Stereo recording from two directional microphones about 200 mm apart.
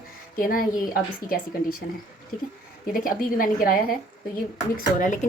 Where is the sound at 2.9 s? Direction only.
45° left (ahead or behind).